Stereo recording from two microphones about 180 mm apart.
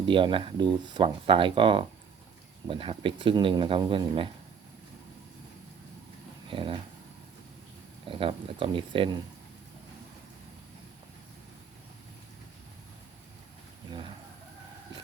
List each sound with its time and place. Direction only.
0.0 s speech: 30° right (ahead or behind)
6.5 s speech: 30° right (ahead or behind)
8.0 s speech: 30° right (ahead or behind)